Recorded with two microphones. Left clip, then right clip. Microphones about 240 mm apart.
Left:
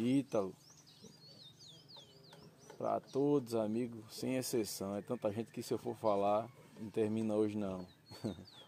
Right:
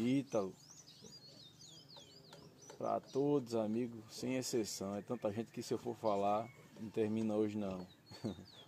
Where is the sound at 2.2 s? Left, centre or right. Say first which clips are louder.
Right 1 dB; right.